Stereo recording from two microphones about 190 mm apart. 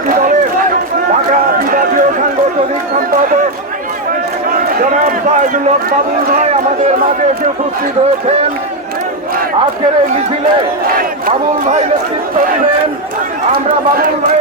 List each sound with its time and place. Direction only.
0.1 s a sound: 45° right (ahead or behind)
1.5 s run: 50° right (ahead or behind)
6.2 s speech: 45° right (ahead or behind)
10.8 s speech: 50° right (ahead or behind)
13.5 s speech: 50° right (ahead or behind)